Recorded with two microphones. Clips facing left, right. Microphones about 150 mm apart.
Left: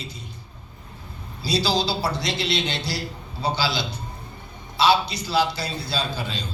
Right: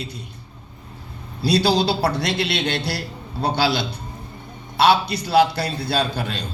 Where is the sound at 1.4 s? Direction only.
60° right (ahead or behind).